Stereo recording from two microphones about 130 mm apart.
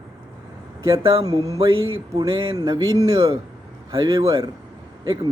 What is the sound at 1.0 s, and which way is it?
Speech, 30° right (ahead or behind).